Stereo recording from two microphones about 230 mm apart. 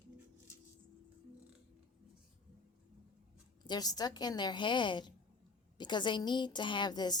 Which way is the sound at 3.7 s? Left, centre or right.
Centre.